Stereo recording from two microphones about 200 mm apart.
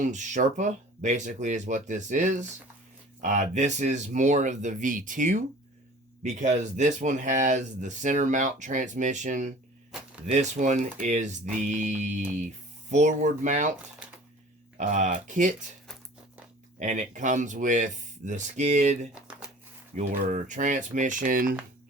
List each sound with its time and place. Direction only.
0.0 s speech: 40° right (ahead or behind)
9.9 s a sound: 5° right (ahead or behind)
10.2 s speech: 35° right (ahead or behind)
14.8 s speech: 40° right (ahead or behind)
16.8 s speech: 40° right (ahead or behind)
20.0 s speech: 35° right (ahead or behind)